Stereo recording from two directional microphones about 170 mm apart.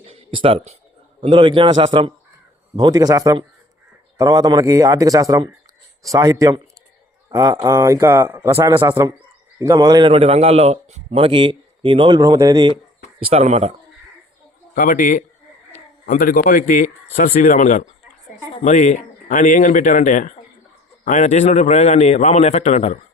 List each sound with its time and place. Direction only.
0.1 s a sound: 30° right (ahead or behind)
1.2 s speech: 30° right (ahead or behind)
10.1 s a man's voice: 35° right (ahead or behind)
13.1 s a man's voice: 40° right (ahead or behind)
14.8 s a man's voice: 55° left (ahead or behind)